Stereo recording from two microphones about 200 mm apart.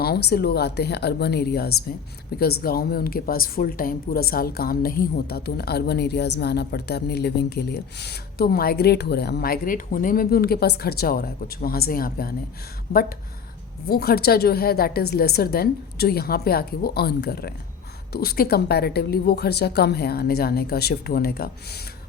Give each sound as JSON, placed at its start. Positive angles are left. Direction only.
{"t": 0.0, "sound": "a woman's voice", "side_deg": 55}